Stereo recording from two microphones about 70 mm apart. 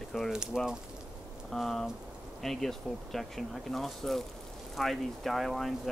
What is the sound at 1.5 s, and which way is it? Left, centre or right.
Speech, centre.